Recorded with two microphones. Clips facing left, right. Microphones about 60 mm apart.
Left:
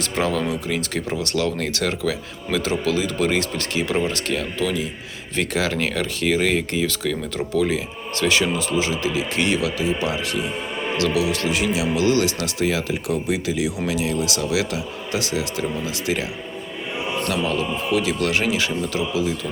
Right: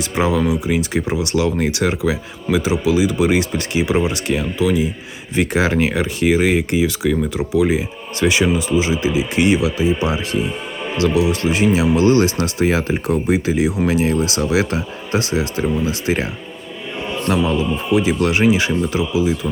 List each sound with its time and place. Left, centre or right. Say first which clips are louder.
0.2 s speech: right 5 dB; centre; by 16.2 s right
17.2 s speech: right 7 dB; right